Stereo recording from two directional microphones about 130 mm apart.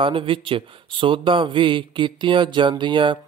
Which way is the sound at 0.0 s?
40° right (ahead or behind).